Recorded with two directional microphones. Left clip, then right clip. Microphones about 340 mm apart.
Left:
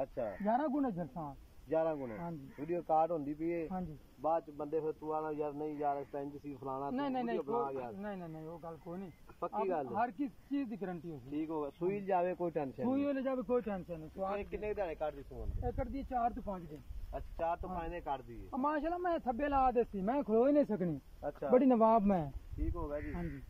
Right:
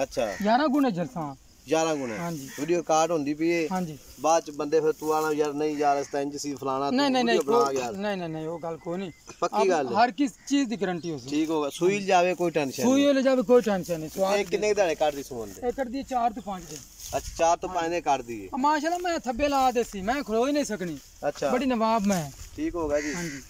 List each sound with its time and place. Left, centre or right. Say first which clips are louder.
0.0 s speech: right 11 dB; right
8.0 s speech: right 15 dB; right
15.9 s speech: right 6 dB; centre
17.1 s speech: right 14 dB; centre
18.5 s speech: right 11 dB; centre
21.2 s speech: right 14 dB; right
21.5 s speech: left 1 dB; centre
22.7 s speech: right 15 dB; right